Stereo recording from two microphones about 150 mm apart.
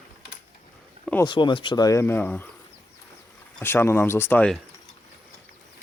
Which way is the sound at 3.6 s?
15° left (ahead or behind).